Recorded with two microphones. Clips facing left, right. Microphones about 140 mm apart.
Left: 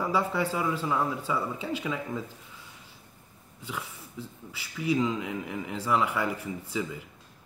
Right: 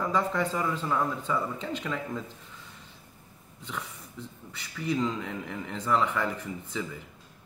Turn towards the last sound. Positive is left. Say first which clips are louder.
# left 2 dB
turn(degrees=10)  # may be behind; listen again after turning